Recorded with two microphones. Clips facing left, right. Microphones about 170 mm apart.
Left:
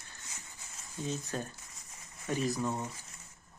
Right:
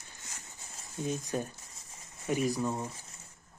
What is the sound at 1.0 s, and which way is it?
Speech, 10° right (ahead or behind).